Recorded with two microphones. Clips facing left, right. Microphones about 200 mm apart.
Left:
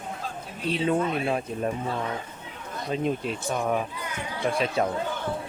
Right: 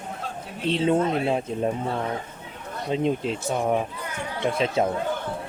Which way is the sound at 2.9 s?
25° right (ahead or behind).